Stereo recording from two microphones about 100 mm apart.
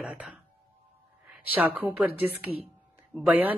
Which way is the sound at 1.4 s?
15° right (ahead or behind).